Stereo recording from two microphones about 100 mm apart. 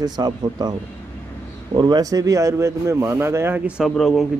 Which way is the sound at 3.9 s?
Centre (ahead or behind).